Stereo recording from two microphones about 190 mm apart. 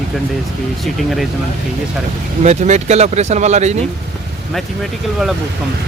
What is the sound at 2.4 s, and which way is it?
Speech, 35° right (ahead or behind).